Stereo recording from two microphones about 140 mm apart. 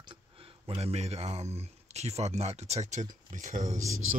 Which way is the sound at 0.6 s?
45° right (ahead or behind).